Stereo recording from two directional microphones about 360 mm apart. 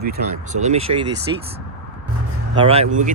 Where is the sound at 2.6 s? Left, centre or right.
Centre.